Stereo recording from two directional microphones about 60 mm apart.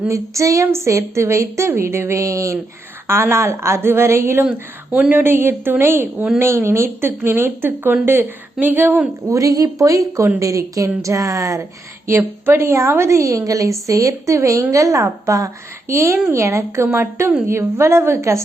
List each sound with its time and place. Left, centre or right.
0.1 s a woman's voice: right
3.1 s a woman's voice: right
4.9 s speech: right
5.2 s a woman's voice: right
9.2 s a woman's voice: right
12.0 s a woman's voice: right
15.9 s a woman's voice: right